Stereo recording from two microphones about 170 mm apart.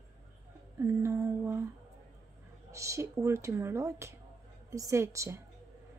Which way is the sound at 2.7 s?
15° right (ahead or behind).